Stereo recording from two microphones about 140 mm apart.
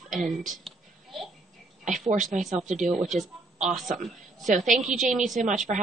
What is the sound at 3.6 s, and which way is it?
Speech, centre (ahead or behind).